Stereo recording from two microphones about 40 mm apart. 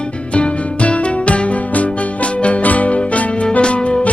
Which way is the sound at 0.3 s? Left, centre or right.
Left.